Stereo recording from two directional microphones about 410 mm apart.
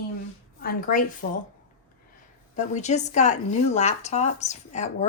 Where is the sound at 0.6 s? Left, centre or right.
Left.